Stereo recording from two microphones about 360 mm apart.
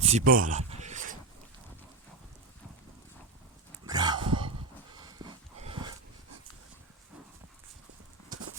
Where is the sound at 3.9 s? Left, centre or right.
Centre.